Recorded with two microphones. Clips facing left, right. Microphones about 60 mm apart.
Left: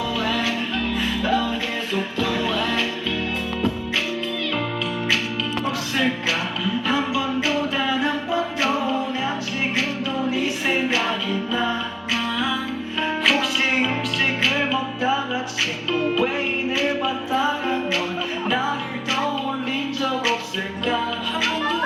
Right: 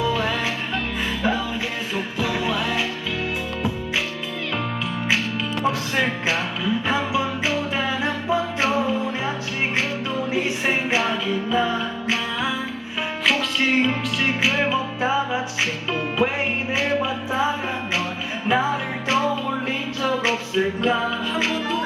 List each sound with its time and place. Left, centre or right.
0.1 s music: right
6.8 s music: right
10.3 s music: right
13.2 s music: centre